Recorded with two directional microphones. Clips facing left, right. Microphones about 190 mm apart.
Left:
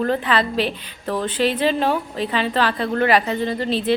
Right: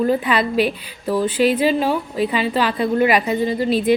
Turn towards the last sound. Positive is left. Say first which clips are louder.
# right 4 dB
turn(degrees=-10)  # may be behind; listen again after turning